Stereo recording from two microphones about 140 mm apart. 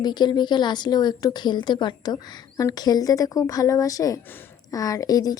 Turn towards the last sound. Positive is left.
turn(degrees=25)  # may be behind; listen again after turning